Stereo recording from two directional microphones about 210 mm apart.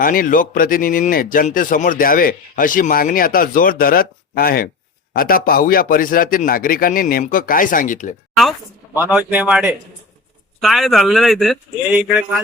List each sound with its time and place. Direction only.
0.0 s speech: 40° left (ahead or behind)
9.0 s a man's voice: 5° right (ahead or behind)